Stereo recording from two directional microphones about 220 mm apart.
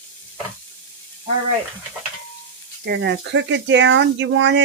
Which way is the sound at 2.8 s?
50° right (ahead or behind).